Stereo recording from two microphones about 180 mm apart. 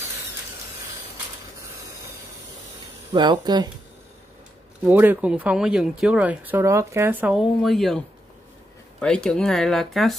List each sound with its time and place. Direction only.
3.1 s speech: 25° right (ahead or behind)
4.8 s speech: 10° right (ahead or behind)
9.0 s speech: 5° left (ahead or behind)